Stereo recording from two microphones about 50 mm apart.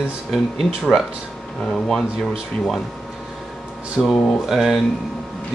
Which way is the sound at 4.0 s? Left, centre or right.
Centre.